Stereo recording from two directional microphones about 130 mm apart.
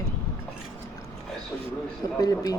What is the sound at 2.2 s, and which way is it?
Speech, 30° left (ahead or behind).